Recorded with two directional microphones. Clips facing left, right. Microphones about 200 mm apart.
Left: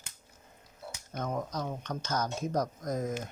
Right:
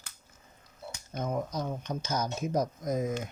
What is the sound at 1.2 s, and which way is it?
Speech, 10° right (ahead or behind).